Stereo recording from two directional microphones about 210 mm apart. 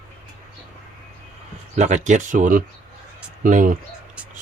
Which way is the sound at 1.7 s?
35° right (ahead or behind).